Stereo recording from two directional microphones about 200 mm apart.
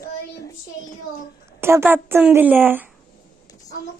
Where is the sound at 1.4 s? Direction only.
10° right (ahead or behind).